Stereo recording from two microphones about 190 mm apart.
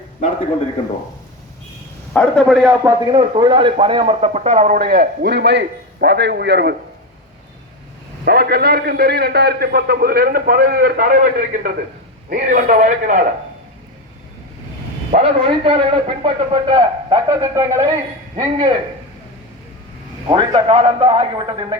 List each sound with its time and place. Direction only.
2.1 s a man's voice: 5° left (ahead or behind)
2.6 s a man's voice: 20° right (ahead or behind); by 6.7 s 60° right (ahead or behind)
8.2 s a man's voice: 55° right (ahead or behind); by 13.2 s 40° right (ahead or behind)
15.1 s a man's voice: 30° right (ahead or behind)
20.2 s a man's voice: 30° right (ahead or behind)